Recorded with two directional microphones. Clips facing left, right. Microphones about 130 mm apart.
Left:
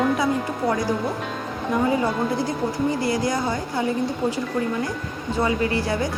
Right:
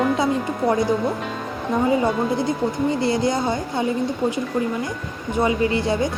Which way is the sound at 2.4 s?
20° right (ahead or behind).